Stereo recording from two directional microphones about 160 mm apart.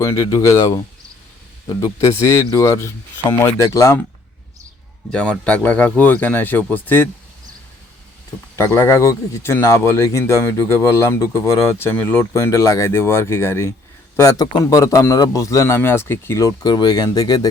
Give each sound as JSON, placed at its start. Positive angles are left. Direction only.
{"t": 0.0, "sound": "a man's voice", "side_deg": 20}
{"t": 5.1, "sound": "speech", "side_deg": 5}
{"t": 8.5, "sound": "a man's voice", "side_deg": 15}